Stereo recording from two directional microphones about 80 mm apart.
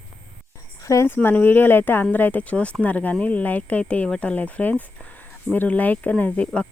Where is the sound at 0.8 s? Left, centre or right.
Left.